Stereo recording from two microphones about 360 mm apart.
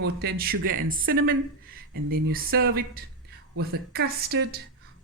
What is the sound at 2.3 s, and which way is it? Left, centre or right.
Speech, right.